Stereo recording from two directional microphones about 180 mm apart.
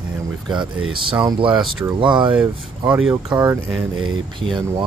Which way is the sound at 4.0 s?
25° right (ahead or behind).